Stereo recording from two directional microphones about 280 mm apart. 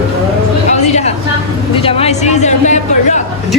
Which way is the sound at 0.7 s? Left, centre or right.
Left.